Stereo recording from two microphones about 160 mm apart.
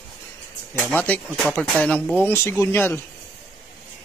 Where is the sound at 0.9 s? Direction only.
10° left (ahead or behind).